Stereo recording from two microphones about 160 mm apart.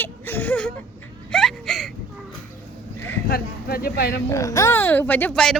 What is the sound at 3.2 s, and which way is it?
Speech, 70° left (ahead or behind).